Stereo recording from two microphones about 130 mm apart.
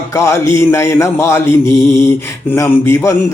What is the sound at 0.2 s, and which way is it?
Mantra, 20° left (ahead or behind).